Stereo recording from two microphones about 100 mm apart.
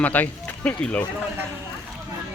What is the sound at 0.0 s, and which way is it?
Speech, 15° left (ahead or behind).